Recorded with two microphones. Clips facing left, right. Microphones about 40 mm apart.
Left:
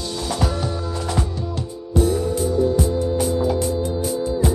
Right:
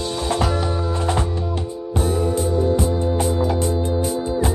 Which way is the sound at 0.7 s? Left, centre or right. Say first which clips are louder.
Right 3 dB; right.